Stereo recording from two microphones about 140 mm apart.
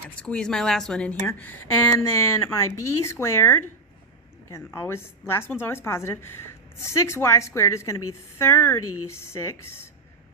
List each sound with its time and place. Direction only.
0.2 s a woman's voice: 5° left (ahead or behind)